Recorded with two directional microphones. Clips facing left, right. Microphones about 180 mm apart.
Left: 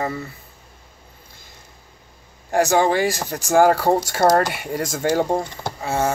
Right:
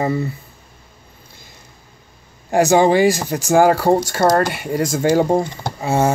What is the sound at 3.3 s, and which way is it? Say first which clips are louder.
Speech: even; 5° right (ahead or behind).